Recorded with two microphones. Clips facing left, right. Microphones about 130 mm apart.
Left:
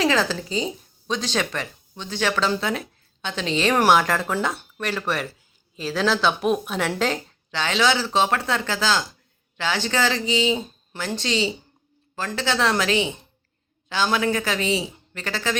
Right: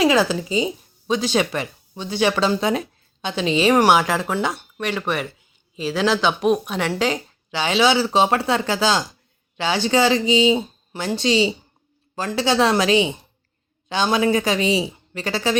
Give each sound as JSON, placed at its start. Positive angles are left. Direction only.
{"t": 0.0, "sound": "speech", "side_deg": -10}
{"t": 7.6, "sound": "speech", "side_deg": -15}